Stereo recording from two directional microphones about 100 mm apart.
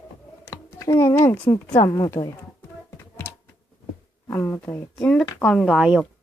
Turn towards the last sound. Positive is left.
turn(degrees=5)  # may be behind; listen again after turning